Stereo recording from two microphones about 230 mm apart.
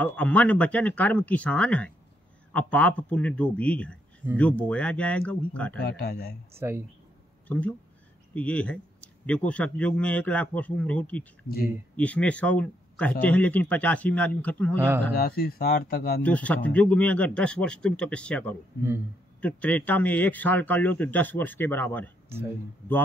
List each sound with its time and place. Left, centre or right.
0.0 s speech: centre
5.9 s speech: left
6.6 s speech: centre
8.4 s speech: centre
15.1 s speech: left
16.2 s speech: centre